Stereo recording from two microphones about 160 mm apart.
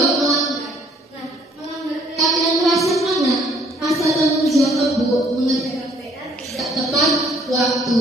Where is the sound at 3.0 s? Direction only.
Centre (ahead or behind).